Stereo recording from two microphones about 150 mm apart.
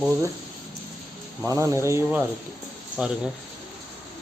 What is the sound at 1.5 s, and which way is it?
Speech, 20° right (ahead or behind).